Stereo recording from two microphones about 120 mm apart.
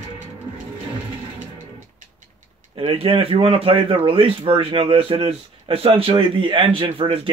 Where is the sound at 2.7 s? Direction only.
45° right (ahead or behind).